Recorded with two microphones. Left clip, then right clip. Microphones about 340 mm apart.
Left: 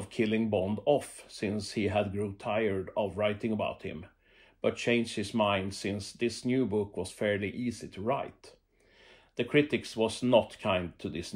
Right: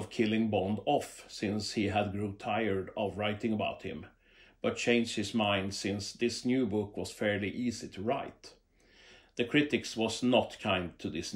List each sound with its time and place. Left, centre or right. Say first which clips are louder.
0.0 s speech: left 1 dB; centre
9.4 s speech: left 2 dB; centre